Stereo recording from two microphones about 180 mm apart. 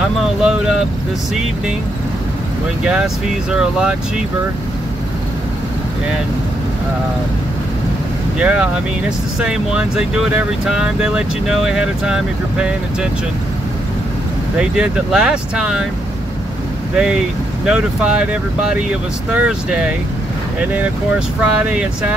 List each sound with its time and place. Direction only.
0.2 s speech: 5° right (ahead or behind)
2.8 s speech: 5° right (ahead or behind)
8.4 s speech: 5° right (ahead or behind)
14.6 s speech: 5° right (ahead or behind)
16.9 s speech: 5° right (ahead or behind)
21.4 s speech: 5° right (ahead or behind)